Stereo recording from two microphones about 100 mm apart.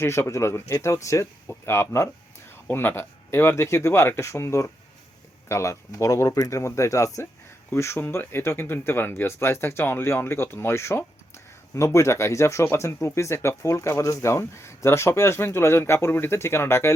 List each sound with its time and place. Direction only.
0.0 s speech: 25° left (ahead or behind)